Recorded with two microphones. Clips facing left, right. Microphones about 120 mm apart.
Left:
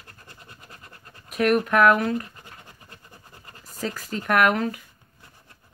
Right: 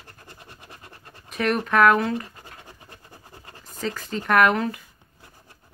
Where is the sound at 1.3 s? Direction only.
5° left (ahead or behind).